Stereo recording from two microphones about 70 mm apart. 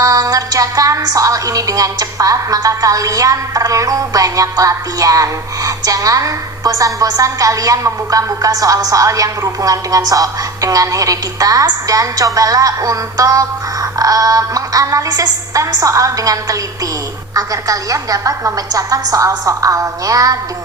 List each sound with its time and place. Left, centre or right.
0.0 s a woman's voice: right